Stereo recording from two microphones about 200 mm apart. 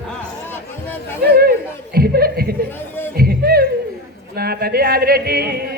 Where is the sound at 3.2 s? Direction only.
50° right (ahead or behind).